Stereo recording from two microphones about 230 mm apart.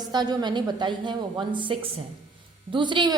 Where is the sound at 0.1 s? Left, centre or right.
Centre.